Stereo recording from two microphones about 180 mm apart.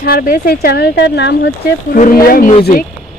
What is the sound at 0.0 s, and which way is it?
Speech, 55° left (ahead or behind).